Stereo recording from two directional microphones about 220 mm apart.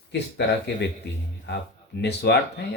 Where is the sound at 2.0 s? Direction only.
50° left (ahead or behind).